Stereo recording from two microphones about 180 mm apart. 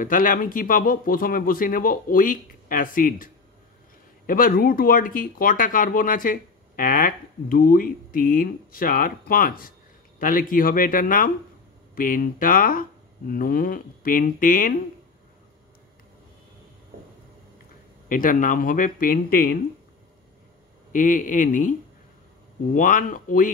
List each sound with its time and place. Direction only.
0.0 s speech: 50° left (ahead or behind)
4.3 s speech: 55° left (ahead or behind)
18.0 s speech: 50° left (ahead or behind)
20.9 s speech: 45° left (ahead or behind)